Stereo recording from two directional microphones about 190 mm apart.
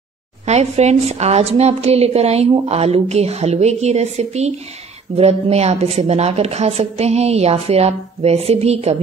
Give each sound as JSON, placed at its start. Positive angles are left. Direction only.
{"t": 0.5, "sound": "a woman's voice", "side_deg": -35}